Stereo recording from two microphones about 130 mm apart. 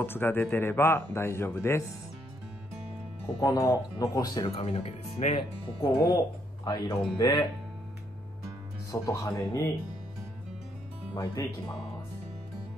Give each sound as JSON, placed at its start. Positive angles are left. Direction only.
{"t": 0.0, "sound": "speech", "side_deg": 15}
{"t": 3.3, "sound": "speech", "side_deg": 25}
{"t": 4.6, "sound": "speech", "side_deg": 55}
{"t": 5.9, "sound": "speech", "side_deg": 30}
{"t": 8.9, "sound": "speech", "side_deg": 25}